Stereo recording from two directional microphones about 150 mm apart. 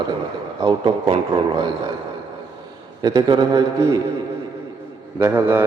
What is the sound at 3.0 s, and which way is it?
Speech, 30° right (ahead or behind).